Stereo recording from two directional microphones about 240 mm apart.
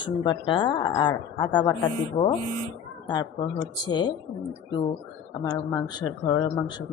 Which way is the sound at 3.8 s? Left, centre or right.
Centre.